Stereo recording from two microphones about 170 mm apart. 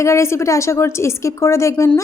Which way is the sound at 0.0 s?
15° left (ahead or behind).